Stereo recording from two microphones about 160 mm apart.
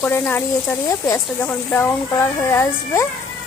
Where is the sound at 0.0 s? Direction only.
10° left (ahead or behind).